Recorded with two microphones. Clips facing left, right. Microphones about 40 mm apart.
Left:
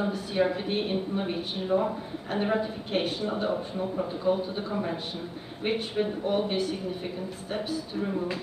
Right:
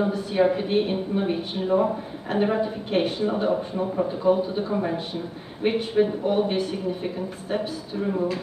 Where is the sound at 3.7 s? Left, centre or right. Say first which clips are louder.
Right 5 dB; right.